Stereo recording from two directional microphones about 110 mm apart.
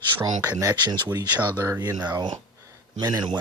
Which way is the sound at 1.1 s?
40° right (ahead or behind).